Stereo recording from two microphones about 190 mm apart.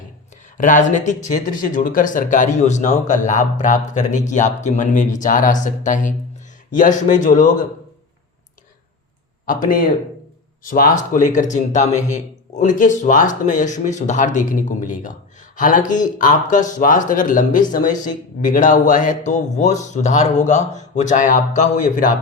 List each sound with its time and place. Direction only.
0.5 s speech: 45° left (ahead or behind)
9.5 s speech: 45° left (ahead or behind)